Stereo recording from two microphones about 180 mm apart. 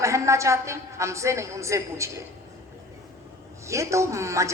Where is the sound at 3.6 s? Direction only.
15° right (ahead or behind).